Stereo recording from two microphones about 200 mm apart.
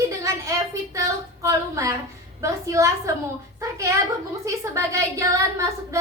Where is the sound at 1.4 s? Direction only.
15° right (ahead or behind).